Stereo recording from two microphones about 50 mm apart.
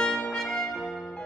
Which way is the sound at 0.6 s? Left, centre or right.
Centre.